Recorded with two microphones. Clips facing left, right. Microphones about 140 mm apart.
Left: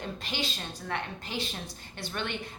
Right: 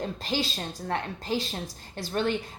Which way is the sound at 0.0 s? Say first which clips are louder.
Right 5 dB; 40° right (ahead or behind).